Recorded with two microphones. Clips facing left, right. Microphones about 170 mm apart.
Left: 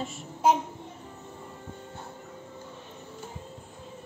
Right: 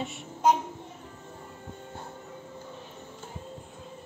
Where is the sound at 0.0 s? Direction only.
5° left (ahead or behind).